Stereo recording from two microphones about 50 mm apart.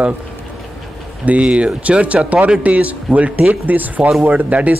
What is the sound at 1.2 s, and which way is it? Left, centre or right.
A man's voice, right.